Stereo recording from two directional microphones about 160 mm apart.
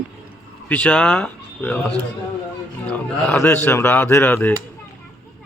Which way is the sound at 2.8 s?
10° left (ahead or behind).